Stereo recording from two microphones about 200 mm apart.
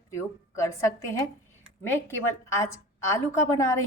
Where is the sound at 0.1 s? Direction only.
15° left (ahead or behind).